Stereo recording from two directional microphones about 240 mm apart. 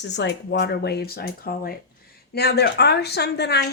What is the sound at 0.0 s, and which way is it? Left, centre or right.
A woman's voice, left.